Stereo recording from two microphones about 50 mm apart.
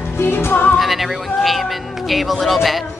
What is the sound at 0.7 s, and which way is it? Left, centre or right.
A woman's voice, centre.